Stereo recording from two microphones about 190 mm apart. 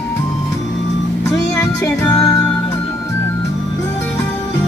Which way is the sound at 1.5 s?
10° left (ahead or behind).